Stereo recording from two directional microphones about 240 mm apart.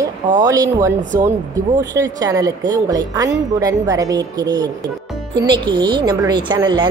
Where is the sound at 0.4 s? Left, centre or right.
Centre.